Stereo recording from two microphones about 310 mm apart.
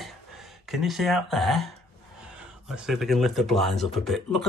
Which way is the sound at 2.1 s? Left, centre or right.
Centre.